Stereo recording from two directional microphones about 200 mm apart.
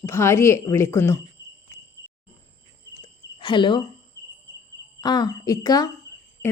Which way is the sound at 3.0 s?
25° left (ahead or behind).